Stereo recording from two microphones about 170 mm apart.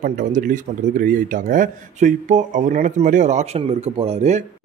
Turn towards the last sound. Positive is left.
turn(degrees=-40)  # may be behind; listen again after turning